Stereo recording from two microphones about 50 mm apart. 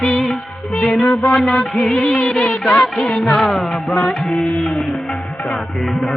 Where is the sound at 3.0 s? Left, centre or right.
Centre.